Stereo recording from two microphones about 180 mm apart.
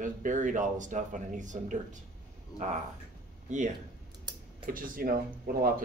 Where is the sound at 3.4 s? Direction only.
45° right (ahead or behind).